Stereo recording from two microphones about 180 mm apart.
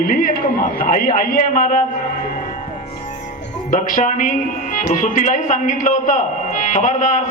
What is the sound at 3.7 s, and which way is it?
A man's voice, 45° left (ahead or behind).